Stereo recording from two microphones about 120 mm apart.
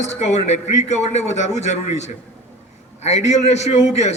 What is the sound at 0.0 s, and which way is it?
A man's voice, 70° left (ahead or behind).